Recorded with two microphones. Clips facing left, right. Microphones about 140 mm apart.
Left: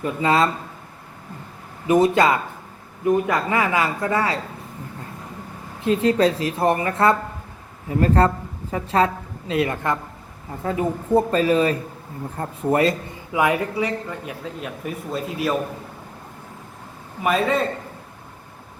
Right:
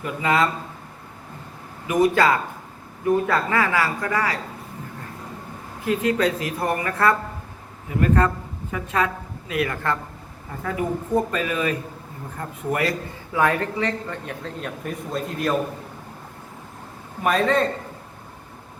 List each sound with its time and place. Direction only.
0.0 s a woman's voice: 30° left (ahead or behind)
1.9 s a woman's voice: 25° left (ahead or behind)
5.8 s a woman's voice: 30° left (ahead or behind)
13.4 s a man's voice: 10° left (ahead or behind)
17.2 s a man's voice: 5° left (ahead or behind)